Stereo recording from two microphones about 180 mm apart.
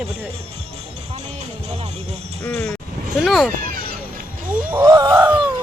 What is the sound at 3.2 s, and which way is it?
Speech, centre (ahead or behind).